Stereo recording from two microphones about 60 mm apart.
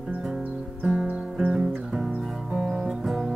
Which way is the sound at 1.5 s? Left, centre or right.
Centre.